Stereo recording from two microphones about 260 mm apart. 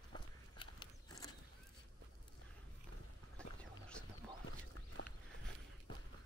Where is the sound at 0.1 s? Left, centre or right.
Centre.